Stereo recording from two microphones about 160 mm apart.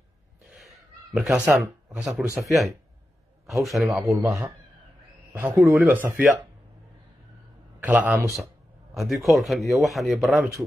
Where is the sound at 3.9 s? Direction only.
15° right (ahead or behind).